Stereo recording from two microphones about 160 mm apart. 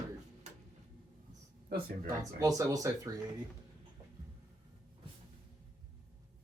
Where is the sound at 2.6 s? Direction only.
20° right (ahead or behind).